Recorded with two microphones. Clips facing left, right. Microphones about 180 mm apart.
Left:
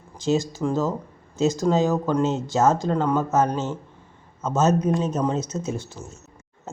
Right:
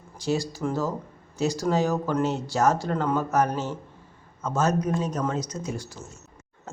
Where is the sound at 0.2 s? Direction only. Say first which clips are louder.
Left 4 dB; 20° left (ahead or behind).